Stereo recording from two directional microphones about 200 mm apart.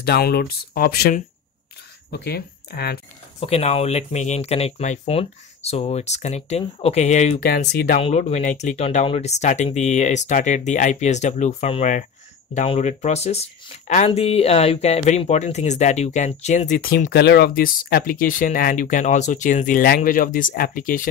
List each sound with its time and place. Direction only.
0.0 s speech: 50° left (ahead or behind)
3.3 s speech: 30° left (ahead or behind)
7.3 s speech: 50° left (ahead or behind)
8.0 s speech: 35° left (ahead or behind)